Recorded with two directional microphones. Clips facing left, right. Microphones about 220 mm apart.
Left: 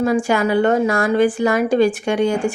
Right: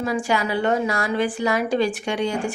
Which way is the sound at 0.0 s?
50° left (ahead or behind).